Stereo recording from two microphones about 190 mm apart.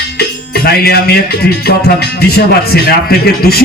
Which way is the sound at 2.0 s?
55° left (ahead or behind).